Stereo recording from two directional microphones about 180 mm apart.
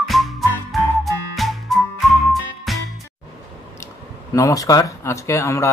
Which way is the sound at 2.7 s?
Centre (ahead or behind).